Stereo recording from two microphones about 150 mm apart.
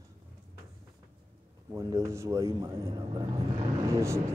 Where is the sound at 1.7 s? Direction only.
20° right (ahead or behind).